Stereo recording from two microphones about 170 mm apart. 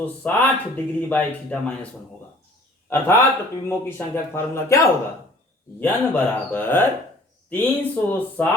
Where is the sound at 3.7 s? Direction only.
15° left (ahead or behind).